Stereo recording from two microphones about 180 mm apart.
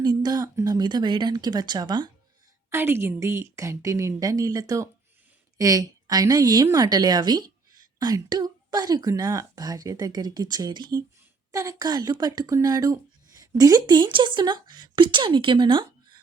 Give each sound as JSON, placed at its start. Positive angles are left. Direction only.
{"t": 0.0, "sound": "a woman's voice", "side_deg": -20}
{"t": 2.6, "sound": "a woman's voice", "side_deg": -15}